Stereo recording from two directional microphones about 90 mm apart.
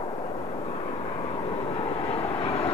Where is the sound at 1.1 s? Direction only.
90° left.